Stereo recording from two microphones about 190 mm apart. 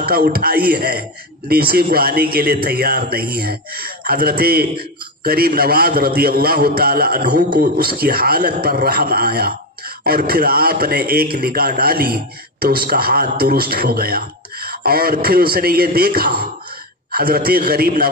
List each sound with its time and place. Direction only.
0.0 s a man's voice: 50° right (ahead or behind)